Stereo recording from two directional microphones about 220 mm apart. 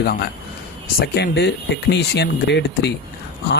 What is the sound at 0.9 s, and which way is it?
Speech, 45° left (ahead or behind).